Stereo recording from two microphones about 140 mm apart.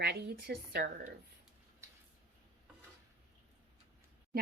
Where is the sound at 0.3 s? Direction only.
90° right.